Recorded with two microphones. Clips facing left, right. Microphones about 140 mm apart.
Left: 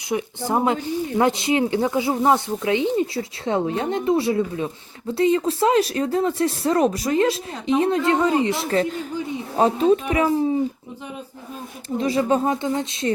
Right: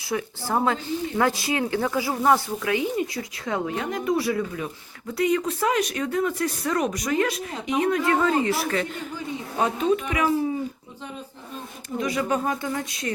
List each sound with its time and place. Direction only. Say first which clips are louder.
0.1 s speech: left 3 dB; 20° left (ahead or behind)
8.7 s speech: left 6 dB; 35° left (ahead or behind)
11.9 s speech: left 5 dB; 30° left (ahead or behind)